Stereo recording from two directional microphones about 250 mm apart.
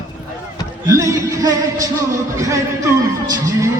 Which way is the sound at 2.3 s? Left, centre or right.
Centre.